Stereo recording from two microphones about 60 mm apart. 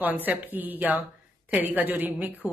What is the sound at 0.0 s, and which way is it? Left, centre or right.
A woman's voice, right.